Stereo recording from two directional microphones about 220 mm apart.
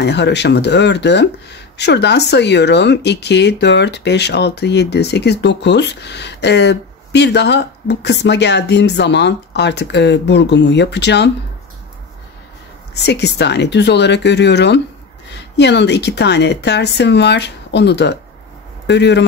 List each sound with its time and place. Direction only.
0.0 s speech: 50° left (ahead or behind)
12.9 s speech: 50° left (ahead or behind)